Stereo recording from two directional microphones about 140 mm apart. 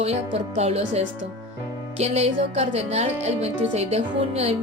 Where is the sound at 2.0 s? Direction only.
50° right (ahead or behind).